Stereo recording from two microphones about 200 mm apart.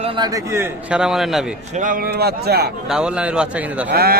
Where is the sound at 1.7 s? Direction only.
40° right (ahead or behind).